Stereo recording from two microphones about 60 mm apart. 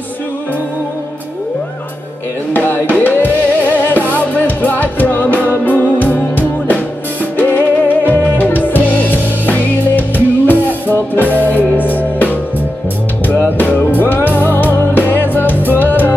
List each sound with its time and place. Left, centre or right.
2.5 s music: left